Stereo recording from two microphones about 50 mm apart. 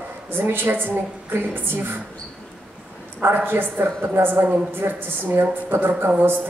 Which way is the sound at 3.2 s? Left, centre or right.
Right.